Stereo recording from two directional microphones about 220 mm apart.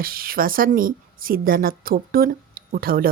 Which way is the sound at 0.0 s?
40° right (ahead or behind).